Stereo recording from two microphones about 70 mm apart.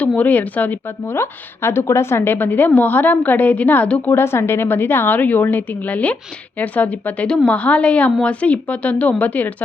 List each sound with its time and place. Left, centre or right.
0.2 s a woman's voice: left
1.1 s a woman's voice: left; by 4.1 s centre
4.1 s a woman's voice: left